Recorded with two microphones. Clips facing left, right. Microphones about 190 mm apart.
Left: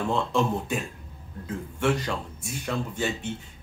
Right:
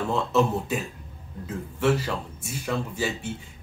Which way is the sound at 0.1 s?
5° right (ahead or behind).